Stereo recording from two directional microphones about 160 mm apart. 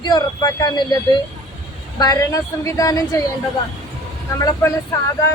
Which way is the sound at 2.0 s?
25° left (ahead or behind).